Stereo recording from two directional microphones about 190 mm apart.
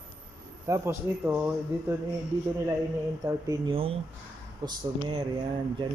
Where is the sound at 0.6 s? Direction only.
15° right (ahead or behind).